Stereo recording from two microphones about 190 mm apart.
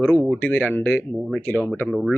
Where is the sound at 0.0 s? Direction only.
Centre (ahead or behind).